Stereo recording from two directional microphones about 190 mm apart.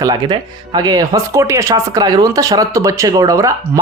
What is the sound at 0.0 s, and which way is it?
Speech, 20° right (ahead or behind).